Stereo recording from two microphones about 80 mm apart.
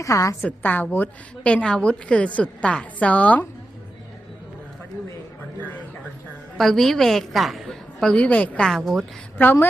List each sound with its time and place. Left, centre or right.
0.0 s a woman's voice: left
0.4 s a woman's voice: left
6.6 s a woman's voice: centre
9.4 s a woman's voice: left